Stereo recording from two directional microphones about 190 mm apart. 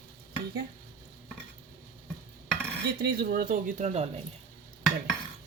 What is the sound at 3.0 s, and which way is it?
Speech, 55° right (ahead or behind).